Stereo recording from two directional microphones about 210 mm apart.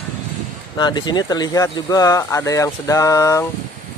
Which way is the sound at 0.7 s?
20° left (ahead or behind).